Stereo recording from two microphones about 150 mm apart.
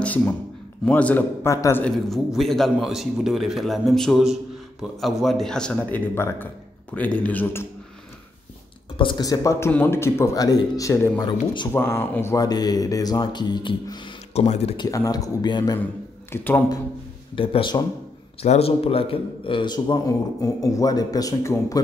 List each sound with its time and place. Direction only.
0.0 s a sound: 10° left (ahead or behind)
0.8 s a man's voice: 10° left (ahead or behind)
8.9 s a man's voice: 30° left (ahead or behind)
11.2 s speech: 30° left (ahead or behind)
11.7 s a man's voice: 15° left (ahead or behind); by 14.1 s 30° left (ahead or behind)
14.3 s speech: 45° left (ahead or behind)
14.8 s a man's voice: 25° left (ahead or behind)
16.3 s speech: 10° left (ahead or behind)
17.4 s a man's voice: 35° left (ahead or behind); by 21.8 s 20° left (ahead or behind)